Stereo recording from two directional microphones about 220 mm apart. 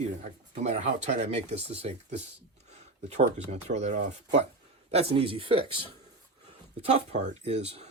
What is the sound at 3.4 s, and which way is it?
Speech, 30° right (ahead or behind).